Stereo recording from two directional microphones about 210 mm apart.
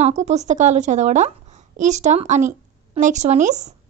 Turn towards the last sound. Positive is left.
turn(degrees=-35)  # may be behind; listen again after turning